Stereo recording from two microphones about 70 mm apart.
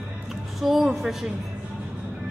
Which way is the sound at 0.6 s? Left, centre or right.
Centre.